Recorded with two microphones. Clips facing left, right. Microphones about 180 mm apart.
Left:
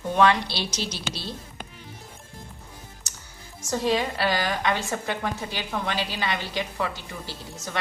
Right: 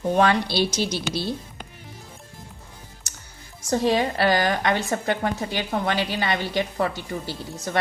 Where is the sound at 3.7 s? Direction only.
40° right (ahead or behind).